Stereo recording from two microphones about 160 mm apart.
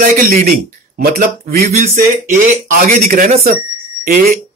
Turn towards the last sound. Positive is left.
turn(degrees=-70)  # may be behind; listen again after turning